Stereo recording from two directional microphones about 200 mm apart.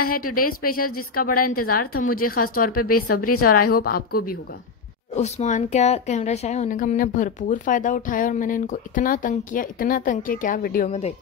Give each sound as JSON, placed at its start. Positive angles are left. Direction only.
{"t": 0.2, "sound": "a woman's voice", "side_deg": 45}
{"t": 0.7, "sound": "a woman's voice", "side_deg": 90}
{"t": 1.1, "sound": "a woman's voice", "side_deg": 45}
{"t": 2.2, "sound": "a woman's voice", "side_deg": 90}
{"t": 2.5, "sound": "a woman's voice", "side_deg": 45}
{"t": 3.0, "sound": "a woman's voice", "side_deg": 90}
{"t": 3.4, "sound": "a woman's voice", "side_deg": 45}
{"t": 5.1, "sound": "a woman's voice", "side_deg": 35}